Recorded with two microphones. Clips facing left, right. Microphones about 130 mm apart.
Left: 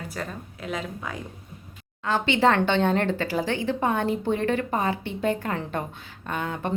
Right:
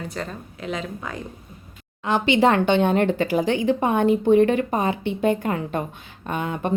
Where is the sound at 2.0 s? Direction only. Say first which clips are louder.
Right 3 dB; 15° right (ahead or behind).